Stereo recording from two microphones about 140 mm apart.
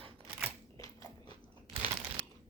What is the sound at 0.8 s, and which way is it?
Biting, 25° left (ahead or behind).